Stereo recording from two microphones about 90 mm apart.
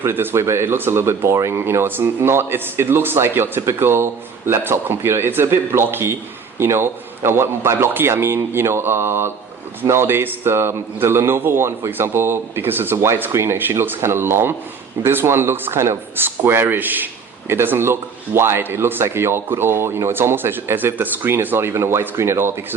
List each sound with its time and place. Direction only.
0.0 s speech: 25° right (ahead or behind)